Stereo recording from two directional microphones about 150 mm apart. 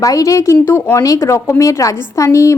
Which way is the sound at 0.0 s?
20° left (ahead or behind).